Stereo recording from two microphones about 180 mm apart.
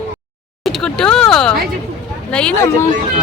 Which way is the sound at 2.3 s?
5° left (ahead or behind).